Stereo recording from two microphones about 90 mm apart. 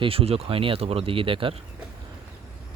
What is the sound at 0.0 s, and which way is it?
Speech, 90° right.